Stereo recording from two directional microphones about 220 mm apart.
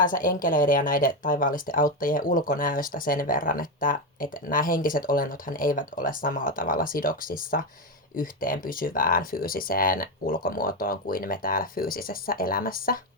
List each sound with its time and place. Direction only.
0.0 s speech: 40° left (ahead or behind)